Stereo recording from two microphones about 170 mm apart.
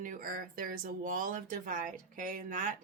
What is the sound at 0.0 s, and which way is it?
Speech, 55° right (ahead or behind).